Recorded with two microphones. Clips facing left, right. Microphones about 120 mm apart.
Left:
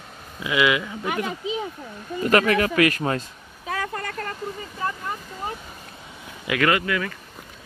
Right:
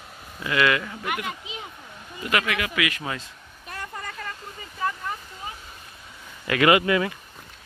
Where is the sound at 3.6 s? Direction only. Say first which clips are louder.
Left 7 dB; 90° left; by 4.3 s 65° left (ahead or behind).